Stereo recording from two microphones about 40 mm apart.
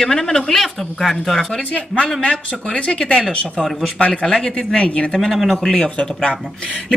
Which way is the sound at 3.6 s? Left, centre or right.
Centre.